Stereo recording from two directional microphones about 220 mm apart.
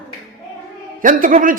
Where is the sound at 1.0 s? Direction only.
35° right (ahead or behind).